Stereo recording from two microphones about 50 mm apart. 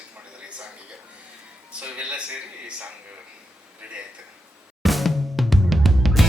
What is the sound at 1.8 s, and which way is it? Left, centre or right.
Speech, right.